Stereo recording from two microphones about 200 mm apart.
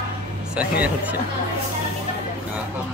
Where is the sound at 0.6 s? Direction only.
5° right (ahead or behind).